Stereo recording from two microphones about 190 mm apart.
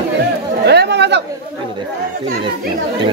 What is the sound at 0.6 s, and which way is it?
Speech, 60° right (ahead or behind).